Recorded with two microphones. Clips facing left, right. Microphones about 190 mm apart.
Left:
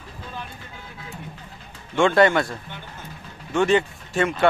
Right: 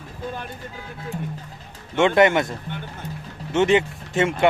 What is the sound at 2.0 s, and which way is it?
Speech, 20° right (ahead or behind).